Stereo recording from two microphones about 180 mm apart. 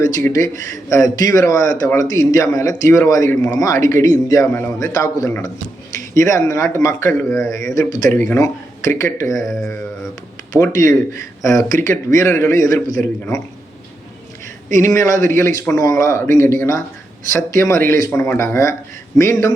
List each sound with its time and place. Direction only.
0.3 s a man's voice: 20° left (ahead or behind)
10.5 s a man's voice: 20° left (ahead or behind)
14.8 s speech: 20° left (ahead or behind)